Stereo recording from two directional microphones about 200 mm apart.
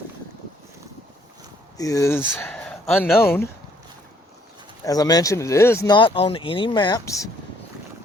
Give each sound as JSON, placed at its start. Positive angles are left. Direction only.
{"t": 1.8, "sound": "speech", "side_deg": 15}
{"t": 4.9, "sound": "speech", "side_deg": 20}